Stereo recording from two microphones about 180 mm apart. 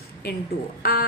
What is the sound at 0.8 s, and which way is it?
Speech, 55° left (ahead or behind).